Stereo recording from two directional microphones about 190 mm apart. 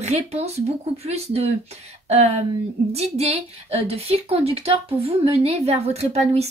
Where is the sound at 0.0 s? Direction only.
35° right (ahead or behind).